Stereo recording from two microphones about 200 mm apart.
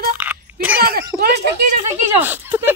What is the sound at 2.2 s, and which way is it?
Speech, 10° right (ahead or behind).